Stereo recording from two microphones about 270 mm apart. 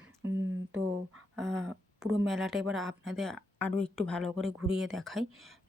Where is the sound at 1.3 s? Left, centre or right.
Centre.